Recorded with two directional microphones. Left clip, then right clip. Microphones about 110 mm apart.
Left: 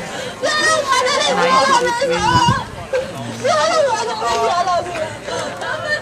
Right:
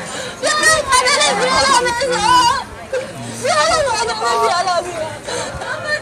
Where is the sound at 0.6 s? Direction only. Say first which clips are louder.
Right 3 dB; 20° right (ahead or behind).